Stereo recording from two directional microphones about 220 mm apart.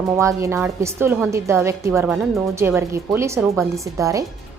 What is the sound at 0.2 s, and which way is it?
A woman's voice, 15° right (ahead or behind).